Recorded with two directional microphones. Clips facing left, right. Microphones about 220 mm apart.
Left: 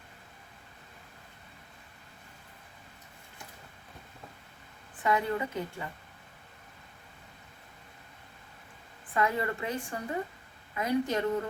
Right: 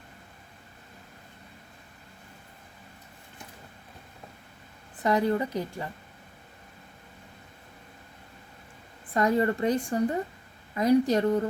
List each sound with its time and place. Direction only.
4.9 s a woman's voice: 35° right (ahead or behind)
9.1 s a woman's voice: 40° right (ahead or behind)